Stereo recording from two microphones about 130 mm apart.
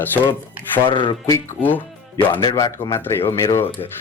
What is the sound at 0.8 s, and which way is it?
Speech, 35° left (ahead or behind).